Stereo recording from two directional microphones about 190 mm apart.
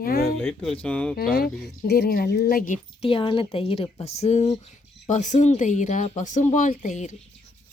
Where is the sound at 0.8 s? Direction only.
5° left (ahead or behind).